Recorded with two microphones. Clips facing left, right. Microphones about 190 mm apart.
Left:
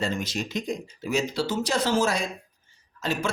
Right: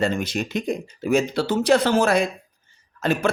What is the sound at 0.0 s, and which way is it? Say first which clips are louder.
A man's voice: right 5 dB; 55° right (ahead or behind).